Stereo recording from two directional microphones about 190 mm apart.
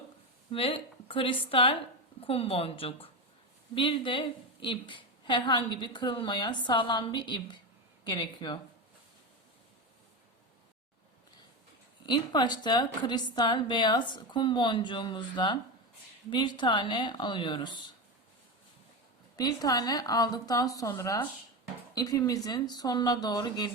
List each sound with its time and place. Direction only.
0.5 s a woman's voice: 30° left (ahead or behind)
12.0 s a woman's voice: 25° left (ahead or behind)
19.4 s a woman's voice: 20° left (ahead or behind)